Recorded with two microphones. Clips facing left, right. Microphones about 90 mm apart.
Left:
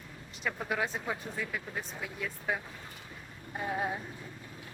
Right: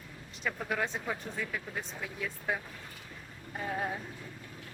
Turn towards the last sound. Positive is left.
turn(degrees=10)  # may be behind; listen again after turning